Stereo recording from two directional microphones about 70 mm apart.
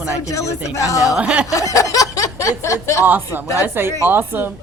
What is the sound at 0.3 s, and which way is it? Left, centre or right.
Speech, left.